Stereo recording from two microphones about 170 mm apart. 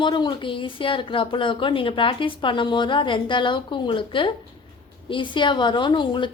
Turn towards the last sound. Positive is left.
turn(degrees=30)  # may be behind; listen again after turning